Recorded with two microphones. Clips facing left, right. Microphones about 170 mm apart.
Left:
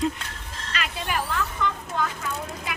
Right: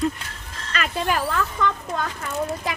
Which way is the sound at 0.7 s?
45° right (ahead or behind).